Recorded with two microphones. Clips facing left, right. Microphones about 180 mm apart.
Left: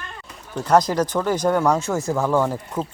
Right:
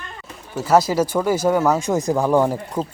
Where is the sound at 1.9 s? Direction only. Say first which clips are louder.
Right 3 dB; 15° right (ahead or behind).